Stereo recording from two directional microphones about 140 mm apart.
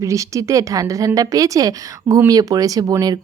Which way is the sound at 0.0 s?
20° right (ahead or behind).